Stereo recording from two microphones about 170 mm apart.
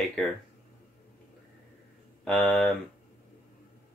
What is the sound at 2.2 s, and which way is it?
Speech, 5° left (ahead or behind).